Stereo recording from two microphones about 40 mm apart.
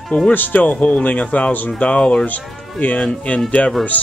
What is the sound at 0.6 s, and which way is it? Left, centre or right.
Speech, left.